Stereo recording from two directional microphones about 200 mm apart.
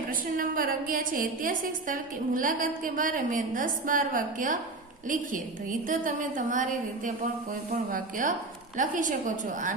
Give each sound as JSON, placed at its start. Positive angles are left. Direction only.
{"t": 0.1, "sound": "a woman's voice", "side_deg": -45}